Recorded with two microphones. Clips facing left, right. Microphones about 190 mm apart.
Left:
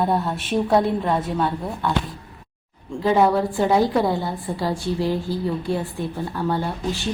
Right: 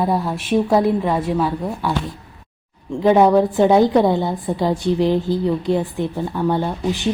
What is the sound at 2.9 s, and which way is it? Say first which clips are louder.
A woman's voice: right 5 dB; 20° right (ahead or behind).